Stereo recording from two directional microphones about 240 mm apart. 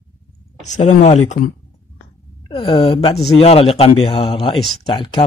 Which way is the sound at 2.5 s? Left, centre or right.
Left.